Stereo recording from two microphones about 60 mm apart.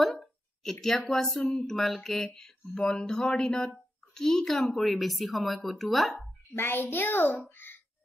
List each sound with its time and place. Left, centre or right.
0.0 s a sound: centre
1.2 s speech: centre
1.7 s speech: centre
6.5 s a child's voice: left